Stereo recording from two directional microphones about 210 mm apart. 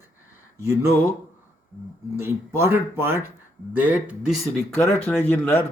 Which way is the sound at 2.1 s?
10° right (ahead or behind).